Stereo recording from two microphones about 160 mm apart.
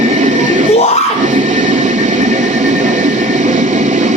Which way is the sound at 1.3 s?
50° right (ahead or behind).